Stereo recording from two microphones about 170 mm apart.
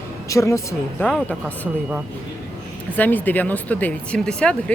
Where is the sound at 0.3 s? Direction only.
20° left (ahead or behind).